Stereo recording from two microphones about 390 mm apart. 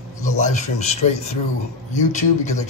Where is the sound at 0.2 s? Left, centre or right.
Centre.